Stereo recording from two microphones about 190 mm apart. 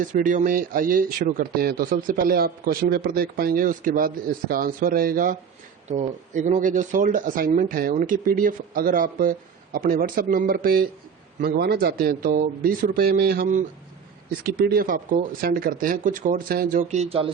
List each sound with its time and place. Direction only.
0.0 s speech: 45° right (ahead or behind)
16.9 s speech: 35° right (ahead or behind)